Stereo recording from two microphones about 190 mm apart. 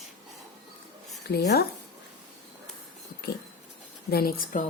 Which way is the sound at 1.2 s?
60° left (ahead or behind).